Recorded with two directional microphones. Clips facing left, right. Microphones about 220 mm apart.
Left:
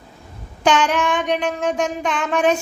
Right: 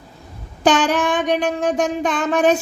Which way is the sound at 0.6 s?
35° right (ahead or behind).